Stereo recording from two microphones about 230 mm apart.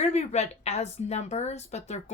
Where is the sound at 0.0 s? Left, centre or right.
Left.